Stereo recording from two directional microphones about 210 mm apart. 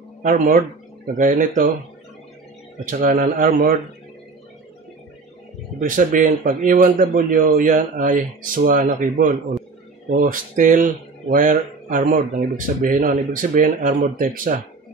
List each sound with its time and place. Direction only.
0.2 s speech: 40° right (ahead or behind)
2.8 s speech: 40° right (ahead or behind)
5.8 s speech: 40° right (ahead or behind)